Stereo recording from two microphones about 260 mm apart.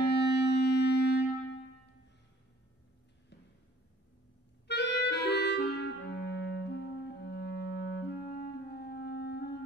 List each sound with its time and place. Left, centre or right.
0.0 s clarinet: left
4.6 s clarinet: left